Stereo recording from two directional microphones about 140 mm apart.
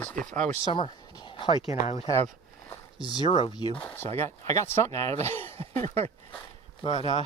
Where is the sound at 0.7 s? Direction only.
35° left (ahead or behind).